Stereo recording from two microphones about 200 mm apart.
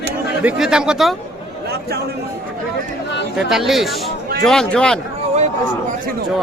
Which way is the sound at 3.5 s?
Centre (ahead or behind).